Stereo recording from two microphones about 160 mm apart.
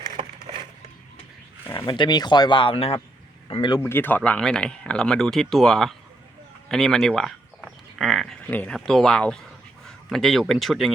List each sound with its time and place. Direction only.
0.5 s a sound: 35° right (ahead or behind)
1.6 s speech: 15° left (ahead or behind)
1.9 s speech: 25° left (ahead or behind)
3.8 s speech: 15° left (ahead or behind)